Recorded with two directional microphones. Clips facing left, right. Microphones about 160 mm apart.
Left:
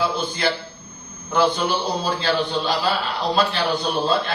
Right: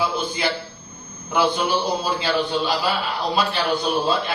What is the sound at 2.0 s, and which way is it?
A man's voice, 10° right (ahead or behind).